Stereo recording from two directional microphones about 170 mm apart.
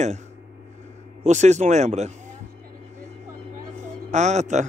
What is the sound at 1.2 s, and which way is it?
Speech, 45° right (ahead or behind).